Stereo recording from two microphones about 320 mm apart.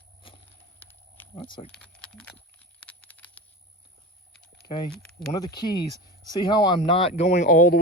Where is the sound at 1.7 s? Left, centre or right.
Centre.